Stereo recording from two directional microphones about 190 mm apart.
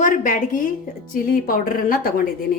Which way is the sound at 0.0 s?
45° left (ahead or behind).